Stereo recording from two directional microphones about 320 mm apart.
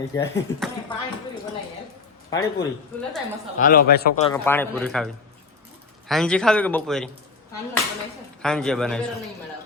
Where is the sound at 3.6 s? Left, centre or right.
Left.